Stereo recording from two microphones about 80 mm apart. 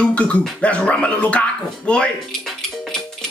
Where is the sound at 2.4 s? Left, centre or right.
Centre.